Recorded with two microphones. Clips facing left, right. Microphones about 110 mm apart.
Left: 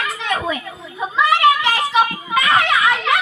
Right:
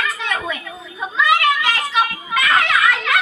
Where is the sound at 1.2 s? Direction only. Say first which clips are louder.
Left 2 dB; 30° left (ahead or behind).